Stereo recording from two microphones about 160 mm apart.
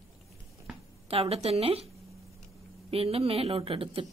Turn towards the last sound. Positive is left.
turn(degrees=-35)  # may be behind; listen again after turning